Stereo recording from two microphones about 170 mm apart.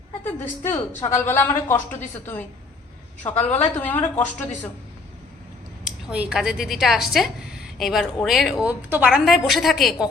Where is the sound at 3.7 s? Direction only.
10° left (ahead or behind).